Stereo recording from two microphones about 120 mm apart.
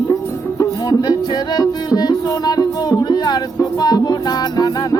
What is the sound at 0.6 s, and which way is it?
Music, 35° left (ahead or behind).